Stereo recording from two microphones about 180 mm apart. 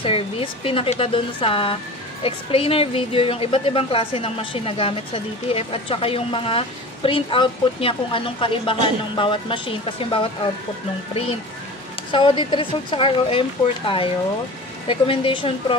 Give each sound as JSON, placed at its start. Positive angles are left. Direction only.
{"t": 0.0, "sound": "a woman's voice", "side_deg": 30}
{"t": 12.1, "sound": "speech", "side_deg": 25}